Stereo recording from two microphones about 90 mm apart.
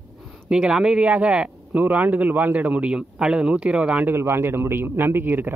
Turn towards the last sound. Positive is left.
turn(degrees=-20)  # may be behind; listen again after turning